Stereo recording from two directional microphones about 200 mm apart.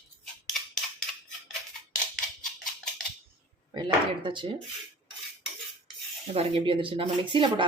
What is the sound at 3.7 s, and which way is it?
Speech, 25° right (ahead or behind).